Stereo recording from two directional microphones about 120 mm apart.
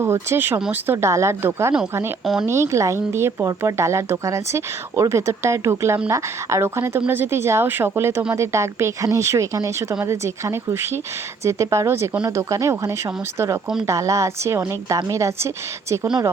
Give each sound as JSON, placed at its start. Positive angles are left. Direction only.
{"t": 0.0, "sound": "speech", "side_deg": -20}
{"t": 2.2, "sound": "speech", "side_deg": -5}
{"t": 2.5, "sound": "speech", "side_deg": -25}